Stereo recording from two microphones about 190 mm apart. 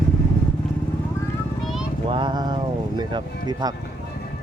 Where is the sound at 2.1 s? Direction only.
25° right (ahead or behind).